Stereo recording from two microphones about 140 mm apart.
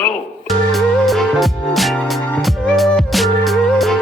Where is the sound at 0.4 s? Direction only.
Centre (ahead or behind).